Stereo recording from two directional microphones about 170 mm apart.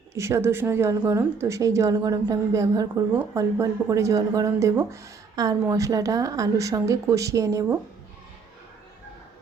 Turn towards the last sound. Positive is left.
turn(degrees=-20)  # may be behind; listen again after turning